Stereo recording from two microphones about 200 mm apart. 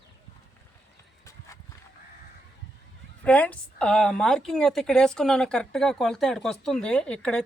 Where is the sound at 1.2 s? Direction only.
15° left (ahead or behind).